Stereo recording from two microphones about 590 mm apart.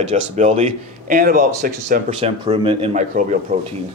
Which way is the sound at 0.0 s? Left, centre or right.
Centre.